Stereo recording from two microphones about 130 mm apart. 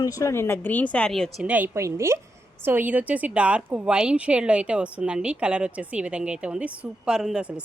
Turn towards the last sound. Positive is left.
turn(degrees=-5)  # may be behind; listen again after turning